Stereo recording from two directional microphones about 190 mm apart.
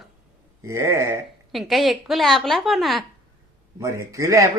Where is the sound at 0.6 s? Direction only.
15° right (ahead or behind).